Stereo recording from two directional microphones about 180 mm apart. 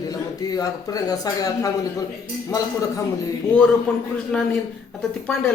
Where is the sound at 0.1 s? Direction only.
20° left (ahead or behind).